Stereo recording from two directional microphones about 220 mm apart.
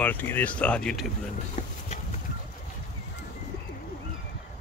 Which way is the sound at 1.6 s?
35° left (ahead or behind).